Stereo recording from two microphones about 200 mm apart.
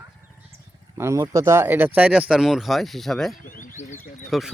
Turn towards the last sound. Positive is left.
turn(degrees=0)  # may be behind; listen again after turning